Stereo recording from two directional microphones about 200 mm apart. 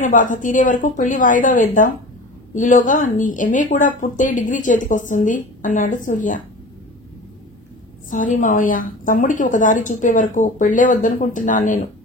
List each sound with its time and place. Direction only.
0.0 s speech: 40° left (ahead or behind)
8.1 s speech: 40° left (ahead or behind)